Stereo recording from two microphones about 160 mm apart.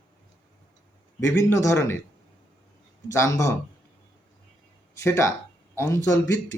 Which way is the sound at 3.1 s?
15° left (ahead or behind).